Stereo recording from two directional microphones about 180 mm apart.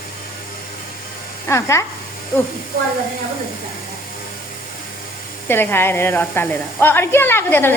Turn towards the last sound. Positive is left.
turn(degrees=10)  # may be behind; listen again after turning